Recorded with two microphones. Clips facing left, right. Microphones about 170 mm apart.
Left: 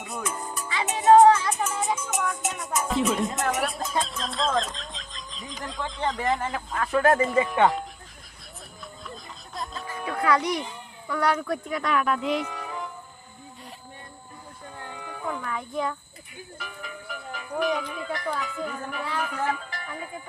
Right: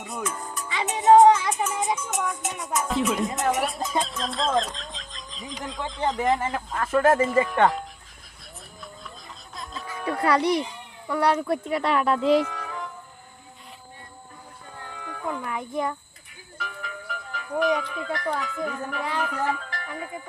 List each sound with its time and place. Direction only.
0.0 s music: centre (ahead or behind)
0.9 s music: 20° right (ahead or behind)
2.0 s music: 5° left (ahead or behind)
2.6 s speech: centre (ahead or behind)
9.6 s music: centre (ahead or behind)
10.1 s speech: 35° right (ahead or behind)
12.5 s music: 5° left (ahead or behind)
14.9 s a sound: 5° left (ahead or behind)
15.4 s speech: 20° right (ahead or behind)
16.6 s speech: 5° left (ahead or behind)